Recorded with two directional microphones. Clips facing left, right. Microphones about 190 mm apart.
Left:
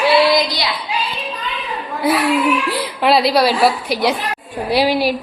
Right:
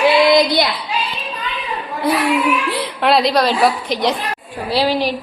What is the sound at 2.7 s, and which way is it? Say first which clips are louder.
A woman's voice: even; centre (ahead or behind).